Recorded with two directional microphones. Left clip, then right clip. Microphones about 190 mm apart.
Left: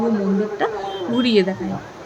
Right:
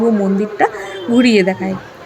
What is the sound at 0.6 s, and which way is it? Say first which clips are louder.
Speech: right 9 dB; 30° right (ahead or behind).